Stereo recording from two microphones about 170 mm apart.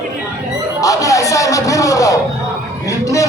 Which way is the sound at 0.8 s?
20° left (ahead or behind).